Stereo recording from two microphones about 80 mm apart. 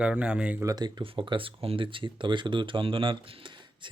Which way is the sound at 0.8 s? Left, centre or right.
Right.